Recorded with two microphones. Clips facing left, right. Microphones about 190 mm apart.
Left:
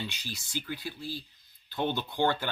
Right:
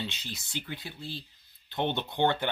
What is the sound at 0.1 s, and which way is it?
Speech, 20° right (ahead or behind).